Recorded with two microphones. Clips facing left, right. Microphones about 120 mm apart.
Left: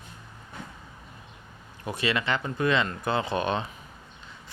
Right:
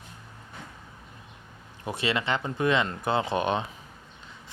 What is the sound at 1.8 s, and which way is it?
Speech, 25° right (ahead or behind).